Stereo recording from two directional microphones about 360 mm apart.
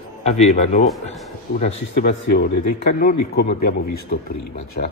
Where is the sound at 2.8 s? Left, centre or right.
Left.